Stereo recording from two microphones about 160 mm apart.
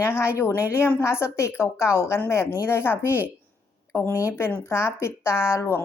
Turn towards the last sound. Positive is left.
turn(degrees=15)  # may be behind; listen again after turning